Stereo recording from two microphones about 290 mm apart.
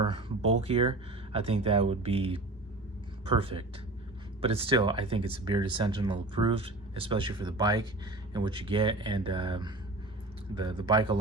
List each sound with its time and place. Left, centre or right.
0.0 s speech: centre